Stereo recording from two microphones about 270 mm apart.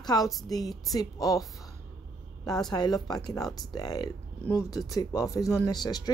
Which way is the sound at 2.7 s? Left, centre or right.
Centre.